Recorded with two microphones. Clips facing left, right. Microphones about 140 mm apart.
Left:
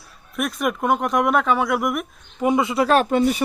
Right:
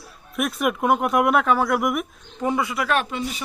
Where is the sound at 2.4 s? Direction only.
20° left (ahead or behind); by 3.1 s 35° left (ahead or behind).